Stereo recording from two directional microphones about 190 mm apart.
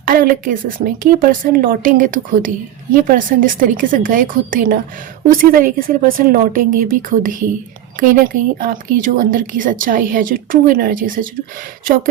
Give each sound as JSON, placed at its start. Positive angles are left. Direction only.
{"t": 0.1, "sound": "speech", "side_deg": -50}